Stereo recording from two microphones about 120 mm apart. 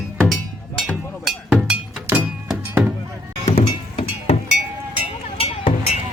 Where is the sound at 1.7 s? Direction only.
15° right (ahead or behind).